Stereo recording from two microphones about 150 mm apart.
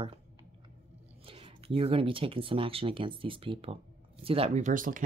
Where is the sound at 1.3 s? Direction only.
40° right (ahead or behind); by 5.0 s 65° right (ahead or behind).